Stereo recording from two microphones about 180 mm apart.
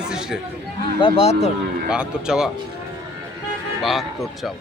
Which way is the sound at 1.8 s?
5° right (ahead or behind).